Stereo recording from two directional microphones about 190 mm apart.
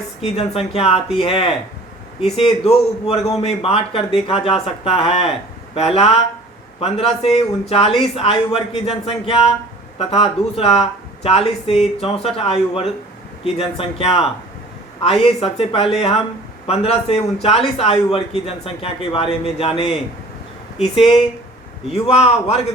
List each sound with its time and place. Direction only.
0.3 s a man's voice: 30° left (ahead or behind)